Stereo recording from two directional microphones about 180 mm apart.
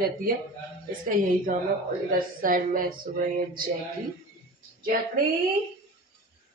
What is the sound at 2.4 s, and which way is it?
Speech, 50° right (ahead or behind).